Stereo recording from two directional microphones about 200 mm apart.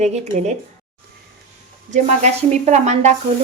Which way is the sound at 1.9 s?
35° right (ahead or behind).